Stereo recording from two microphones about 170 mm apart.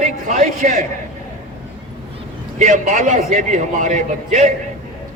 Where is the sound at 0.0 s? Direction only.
50° right (ahead or behind).